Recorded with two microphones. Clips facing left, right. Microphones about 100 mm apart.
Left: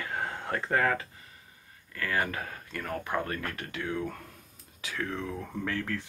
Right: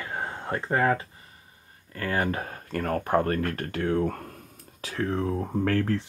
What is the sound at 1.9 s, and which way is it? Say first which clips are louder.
Speech: right 4 dB; 35° right (ahead or behind).